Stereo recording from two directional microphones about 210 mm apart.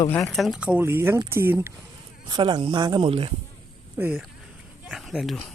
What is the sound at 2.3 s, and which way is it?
Speech, 20° right (ahead or behind).